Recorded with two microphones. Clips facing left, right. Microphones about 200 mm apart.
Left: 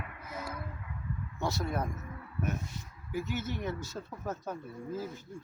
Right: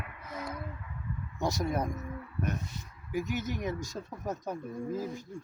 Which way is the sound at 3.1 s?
15° right (ahead or behind).